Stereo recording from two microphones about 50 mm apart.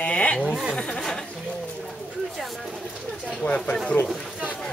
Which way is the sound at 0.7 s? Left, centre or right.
Centre.